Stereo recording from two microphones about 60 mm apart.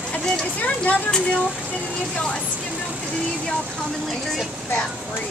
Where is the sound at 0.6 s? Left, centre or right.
Left.